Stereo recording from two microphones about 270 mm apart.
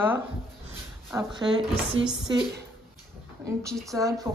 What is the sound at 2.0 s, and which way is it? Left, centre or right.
Speech, right.